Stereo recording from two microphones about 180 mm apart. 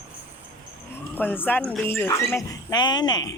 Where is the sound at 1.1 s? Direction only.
10° left (ahead or behind).